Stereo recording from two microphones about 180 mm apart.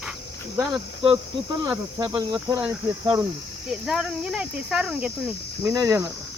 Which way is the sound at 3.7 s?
Centre (ahead or behind).